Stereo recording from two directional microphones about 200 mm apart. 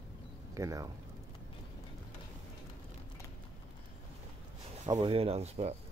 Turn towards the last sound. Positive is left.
turn(degrees=-30)  # may be behind; listen again after turning